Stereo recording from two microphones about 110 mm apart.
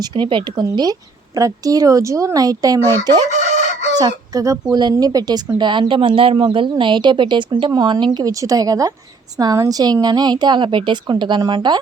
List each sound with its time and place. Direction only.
0.0 s speech: 45° right (ahead or behind)
0.6 s a woman's voice: 35° right (ahead or behind)